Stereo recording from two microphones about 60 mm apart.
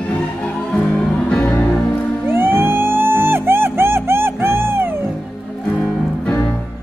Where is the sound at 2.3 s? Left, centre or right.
Right.